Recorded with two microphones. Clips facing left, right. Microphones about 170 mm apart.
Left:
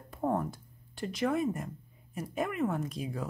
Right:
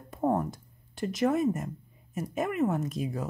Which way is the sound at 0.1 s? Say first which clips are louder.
Right 4 dB; 20° right (ahead or behind).